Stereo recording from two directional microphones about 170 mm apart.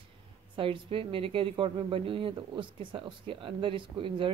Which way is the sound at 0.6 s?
30° right (ahead or behind).